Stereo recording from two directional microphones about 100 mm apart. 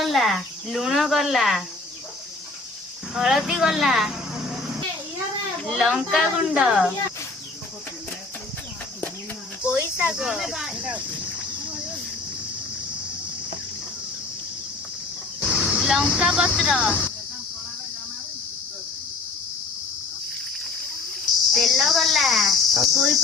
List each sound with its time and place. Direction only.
0.0 s speech: centre (ahead or behind)
3.2 s speech: 5° right (ahead or behind)
5.7 s speech: centre (ahead or behind)
9.8 s cricket: 20° right (ahead or behind)
10.2 s speech: 5° right (ahead or behind)
15.4 s speech: 10° right (ahead or behind)
16.8 s speech: 15° left (ahead or behind)
21.5 s speech: centre (ahead or behind)